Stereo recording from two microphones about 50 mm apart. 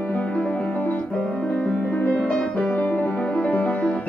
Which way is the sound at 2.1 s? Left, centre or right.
Centre.